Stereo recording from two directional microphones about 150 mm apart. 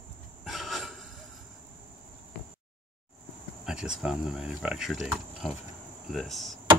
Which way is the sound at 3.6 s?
5° right (ahead or behind).